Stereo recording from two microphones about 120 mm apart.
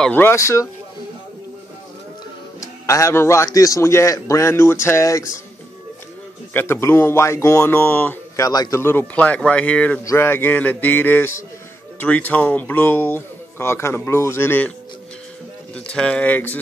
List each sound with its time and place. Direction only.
0.0 s speech: 15° left (ahead or behind)
2.6 s speech: 25° left (ahead or behind)
6.5 s speech: 20° left (ahead or behind)
8.4 s a man's voice: 30° left (ahead or behind)
15.7 s a man's voice: 10° left (ahead or behind)